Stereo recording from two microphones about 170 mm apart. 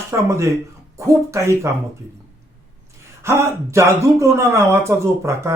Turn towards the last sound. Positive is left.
turn(degrees=-15)  # may be behind; listen again after turning